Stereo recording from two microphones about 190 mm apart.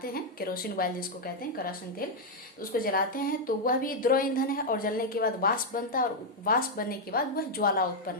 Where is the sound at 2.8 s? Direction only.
50° left (ahead or behind).